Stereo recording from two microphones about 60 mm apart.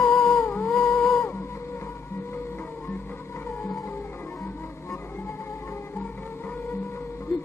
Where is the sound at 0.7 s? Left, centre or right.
Centre.